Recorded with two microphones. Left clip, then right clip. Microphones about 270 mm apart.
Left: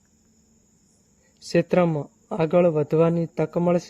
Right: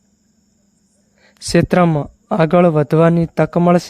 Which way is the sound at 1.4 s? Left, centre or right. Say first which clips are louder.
Right 6 dB; right.